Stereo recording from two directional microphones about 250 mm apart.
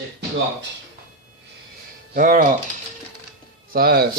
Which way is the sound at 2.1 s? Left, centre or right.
Right.